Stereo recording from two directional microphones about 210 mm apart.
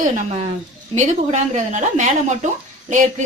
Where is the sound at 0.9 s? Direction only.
35° right (ahead or behind).